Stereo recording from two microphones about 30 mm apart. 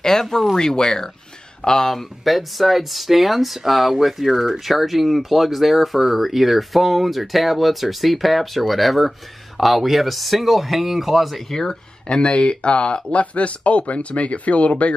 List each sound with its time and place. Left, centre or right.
0.0 s speech: centre
1.9 s speech: centre
11.4 s speech: centre
12.1 s speech: left